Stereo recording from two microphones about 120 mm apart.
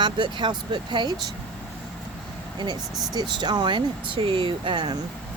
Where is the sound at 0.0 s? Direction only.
40° right (ahead or behind).